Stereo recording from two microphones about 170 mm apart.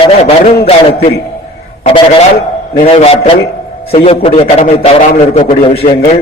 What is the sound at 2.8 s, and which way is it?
A man's voice, 35° left (ahead or behind).